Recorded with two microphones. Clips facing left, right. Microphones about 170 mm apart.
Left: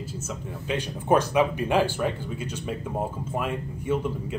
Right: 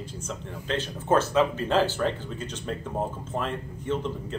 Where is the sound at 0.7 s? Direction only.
15° left (ahead or behind).